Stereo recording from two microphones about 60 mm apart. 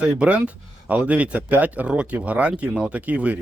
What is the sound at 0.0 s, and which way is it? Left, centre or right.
Speech, right.